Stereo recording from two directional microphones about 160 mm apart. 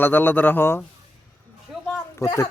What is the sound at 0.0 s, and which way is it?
Speech, 10° left (ahead or behind).